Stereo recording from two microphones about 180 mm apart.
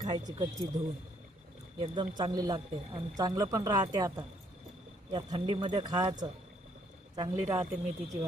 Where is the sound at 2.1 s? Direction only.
20° right (ahead or behind).